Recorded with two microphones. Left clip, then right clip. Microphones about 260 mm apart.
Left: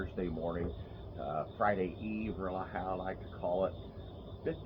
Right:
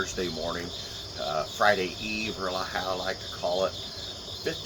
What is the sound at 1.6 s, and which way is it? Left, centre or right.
Speech, centre.